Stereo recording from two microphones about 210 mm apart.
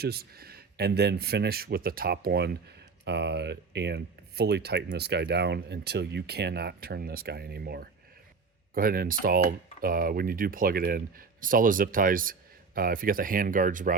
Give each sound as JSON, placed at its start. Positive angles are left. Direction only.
{"t": 0.0, "sound": "speech", "side_deg": -50}